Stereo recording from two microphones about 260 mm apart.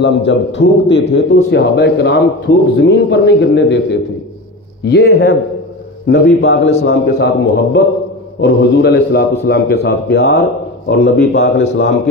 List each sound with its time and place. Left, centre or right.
0.0 s a man's voice: left
4.8 s a man's voice: left